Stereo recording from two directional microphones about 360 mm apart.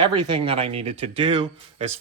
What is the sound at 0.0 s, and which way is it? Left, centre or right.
Speech, centre.